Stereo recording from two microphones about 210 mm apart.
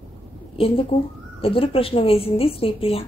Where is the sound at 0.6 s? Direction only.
25° left (ahead or behind).